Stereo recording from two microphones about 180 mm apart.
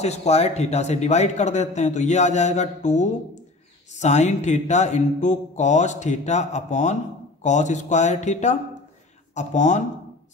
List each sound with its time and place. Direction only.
0.0 s speech: 35° left (ahead or behind)